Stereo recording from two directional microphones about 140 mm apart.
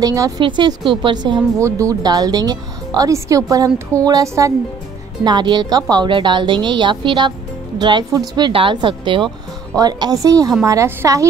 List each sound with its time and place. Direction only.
0.0 s a woman's voice: 25° right (ahead or behind)